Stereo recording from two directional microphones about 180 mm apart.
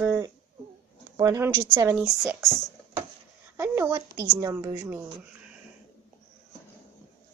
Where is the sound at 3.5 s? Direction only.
15° right (ahead or behind).